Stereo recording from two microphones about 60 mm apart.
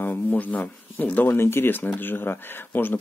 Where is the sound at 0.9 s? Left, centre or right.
Left.